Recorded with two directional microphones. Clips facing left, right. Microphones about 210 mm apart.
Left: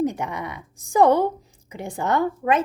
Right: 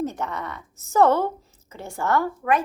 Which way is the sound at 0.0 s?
15° left (ahead or behind).